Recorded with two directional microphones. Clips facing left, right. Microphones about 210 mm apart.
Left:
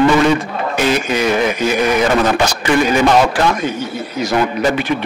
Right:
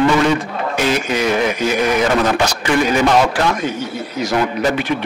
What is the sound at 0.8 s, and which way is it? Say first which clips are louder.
Speech: left 2 dB; 10° left (ahead or behind).